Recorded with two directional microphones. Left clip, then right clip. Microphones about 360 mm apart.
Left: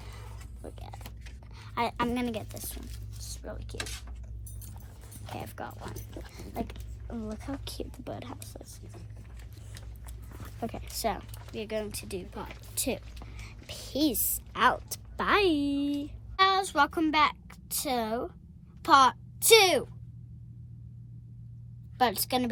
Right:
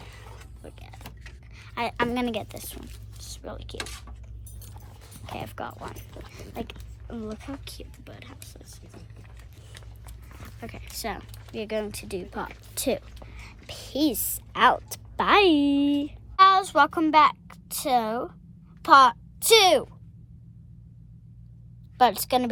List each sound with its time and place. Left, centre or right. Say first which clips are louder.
0.1 s a sound: right 3 dB; centre
1.5 s speech: right 3 dB; centre
3.8 s speech: right 1 dB; right
5.2 s speech: right 5 dB; centre
7.6 s speech: left 3 dB; centre
10.6 s a child's voice: left 3 dB; centre
21.9 s speech: right 6 dB; centre